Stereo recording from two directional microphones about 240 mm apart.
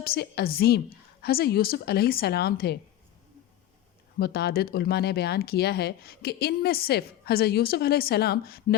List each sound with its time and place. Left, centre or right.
0.0 s speech: left
4.2 s speech: left